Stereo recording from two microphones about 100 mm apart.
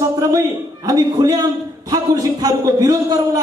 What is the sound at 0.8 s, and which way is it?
A man's voice, 40° right (ahead or behind).